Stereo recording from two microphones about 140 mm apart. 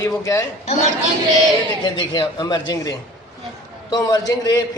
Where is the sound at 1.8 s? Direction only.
35° left (ahead or behind).